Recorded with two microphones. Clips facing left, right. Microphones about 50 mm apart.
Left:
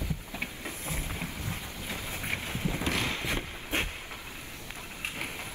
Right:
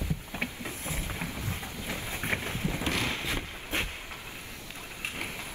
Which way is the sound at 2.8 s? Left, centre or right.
Centre.